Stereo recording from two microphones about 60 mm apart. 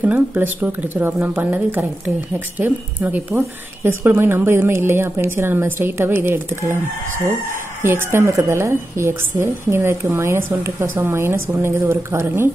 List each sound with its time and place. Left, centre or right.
0.0 s speech: right
7.8 s a woman's voice: right